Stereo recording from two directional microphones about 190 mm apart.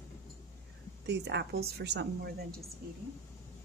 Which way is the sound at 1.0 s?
65° right (ahead or behind).